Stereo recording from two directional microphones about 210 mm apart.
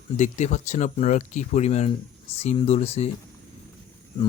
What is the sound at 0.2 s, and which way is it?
Speech, 35° left (ahead or behind).